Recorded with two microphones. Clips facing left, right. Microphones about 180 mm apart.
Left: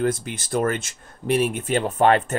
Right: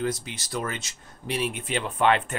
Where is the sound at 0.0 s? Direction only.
50° left (ahead or behind).